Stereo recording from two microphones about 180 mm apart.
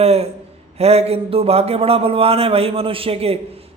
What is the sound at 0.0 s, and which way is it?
A man's voice, 35° right (ahead or behind).